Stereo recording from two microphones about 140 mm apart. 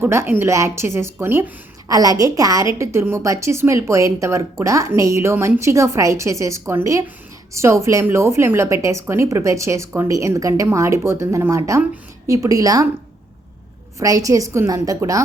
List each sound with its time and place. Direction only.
0.0 s a woman's voice: 15° right (ahead or behind)
14.0 s a woman's voice: 25° right (ahead or behind)